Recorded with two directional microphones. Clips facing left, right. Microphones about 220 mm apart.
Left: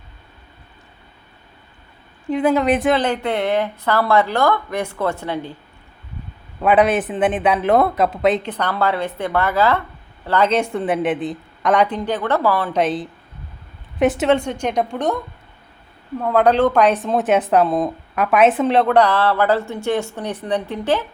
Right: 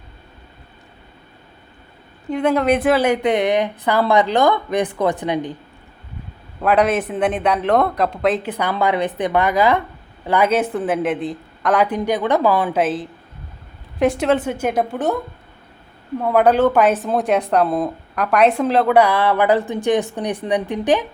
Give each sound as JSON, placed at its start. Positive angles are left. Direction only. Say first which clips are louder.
{"t": 2.3, "sound": "speech", "louder": "even", "side_deg": 5}
{"t": 6.6, "sound": "speech", "louder": "left 1 dB", "side_deg": 0}
{"t": 8.5, "sound": "speech", "louder": "right 1 dB", "side_deg": -10}
{"t": 12.7, "sound": "speech", "louder": "even", "side_deg": 0}
{"t": 16.2, "sound": "speech", "louder": "right 1 dB", "side_deg": -5}